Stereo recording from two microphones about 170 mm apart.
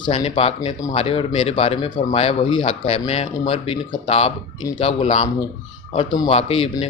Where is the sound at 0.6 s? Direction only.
20° left (ahead or behind).